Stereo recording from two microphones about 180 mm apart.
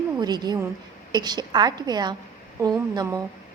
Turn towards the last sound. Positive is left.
turn(degrees=-20)  # may be behind; listen again after turning